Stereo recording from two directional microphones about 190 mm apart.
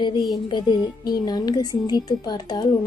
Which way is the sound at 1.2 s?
20° left (ahead or behind).